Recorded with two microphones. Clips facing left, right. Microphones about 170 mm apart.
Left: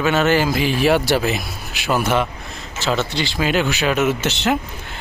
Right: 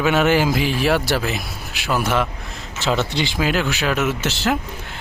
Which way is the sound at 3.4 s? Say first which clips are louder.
Left 3 dB; centre (ahead or behind).